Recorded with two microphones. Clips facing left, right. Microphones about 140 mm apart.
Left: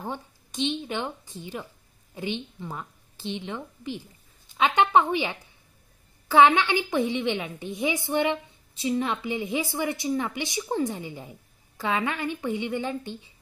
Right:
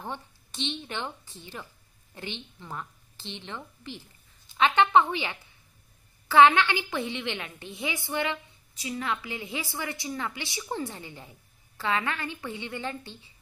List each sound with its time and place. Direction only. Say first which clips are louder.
0.0 s a woman's voice: left 3 dB; 15° left (ahead or behind)